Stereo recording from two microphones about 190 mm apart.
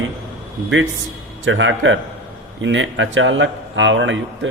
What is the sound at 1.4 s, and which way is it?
Speech, 80° right.